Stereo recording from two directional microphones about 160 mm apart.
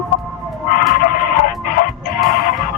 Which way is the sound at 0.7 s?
60° left (ahead or behind).